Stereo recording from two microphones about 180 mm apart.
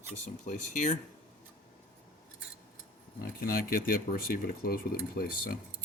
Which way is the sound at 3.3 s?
55° left (ahead or behind).